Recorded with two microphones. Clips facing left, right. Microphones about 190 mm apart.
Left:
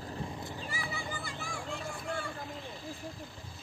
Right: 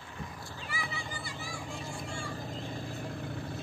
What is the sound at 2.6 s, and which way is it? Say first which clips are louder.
Vehicle: right 4 dB; 55° right (ahead or behind).